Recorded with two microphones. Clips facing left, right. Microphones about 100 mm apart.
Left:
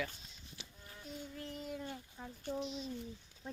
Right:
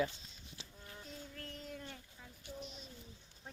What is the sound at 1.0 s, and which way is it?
Child singing, 5° left (ahead or behind).